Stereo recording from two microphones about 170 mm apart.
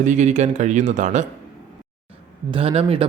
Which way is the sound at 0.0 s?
45° right (ahead or behind).